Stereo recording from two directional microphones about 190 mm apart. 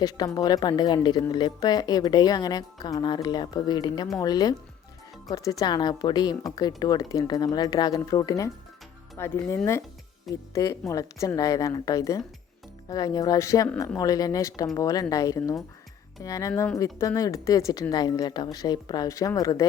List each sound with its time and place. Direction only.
0.3 s speech: 20° left (ahead or behind)